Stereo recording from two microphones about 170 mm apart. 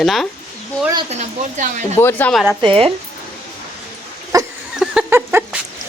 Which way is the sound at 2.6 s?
30° right (ahead or behind).